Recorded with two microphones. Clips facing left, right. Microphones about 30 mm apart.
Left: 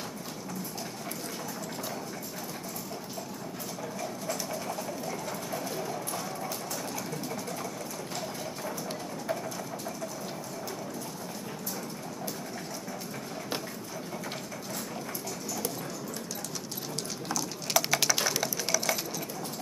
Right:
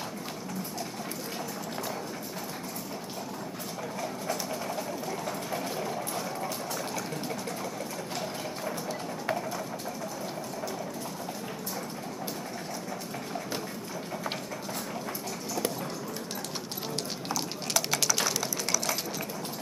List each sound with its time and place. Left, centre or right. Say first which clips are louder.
5.5 s vehicle: even; centre
17.7 s typing: left 2 dB; centre